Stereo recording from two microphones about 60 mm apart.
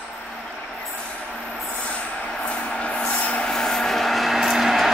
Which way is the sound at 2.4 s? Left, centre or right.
Centre.